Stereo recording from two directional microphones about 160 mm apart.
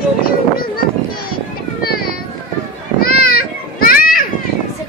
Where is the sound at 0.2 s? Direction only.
65° left (ahead or behind).